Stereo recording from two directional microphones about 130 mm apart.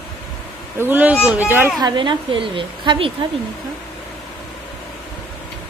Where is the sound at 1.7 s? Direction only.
35° right (ahead or behind).